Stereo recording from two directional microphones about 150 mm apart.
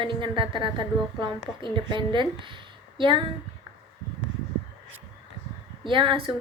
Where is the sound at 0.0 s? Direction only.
35° right (ahead or behind).